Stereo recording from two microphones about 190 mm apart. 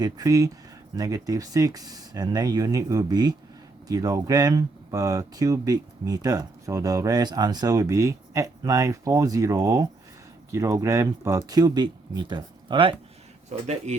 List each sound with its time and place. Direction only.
0.0 s speech: 20° right (ahead or behind)